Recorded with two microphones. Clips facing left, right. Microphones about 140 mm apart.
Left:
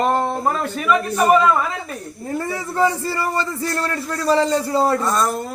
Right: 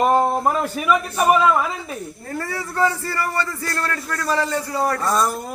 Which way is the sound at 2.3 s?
20° left (ahead or behind).